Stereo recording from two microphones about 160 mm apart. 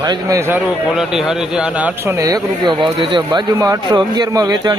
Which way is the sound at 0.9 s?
5° right (ahead or behind).